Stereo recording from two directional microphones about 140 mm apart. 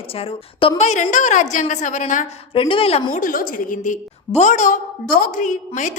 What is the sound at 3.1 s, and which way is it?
Speech, 75° left (ahead or behind).